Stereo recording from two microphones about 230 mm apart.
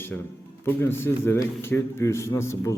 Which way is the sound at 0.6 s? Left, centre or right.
Centre.